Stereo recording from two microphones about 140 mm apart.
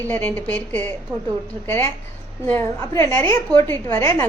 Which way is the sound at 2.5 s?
20° left (ahead or behind).